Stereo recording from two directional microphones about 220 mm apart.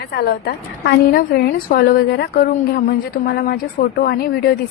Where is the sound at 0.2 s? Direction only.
45° left (ahead or behind).